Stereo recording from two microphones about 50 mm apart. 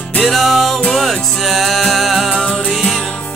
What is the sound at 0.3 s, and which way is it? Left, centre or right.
Music, centre.